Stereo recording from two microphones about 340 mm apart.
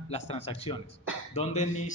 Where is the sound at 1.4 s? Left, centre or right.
Centre.